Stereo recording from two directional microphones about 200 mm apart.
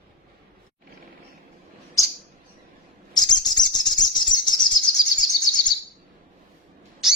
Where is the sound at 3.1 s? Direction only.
20° left (ahead or behind).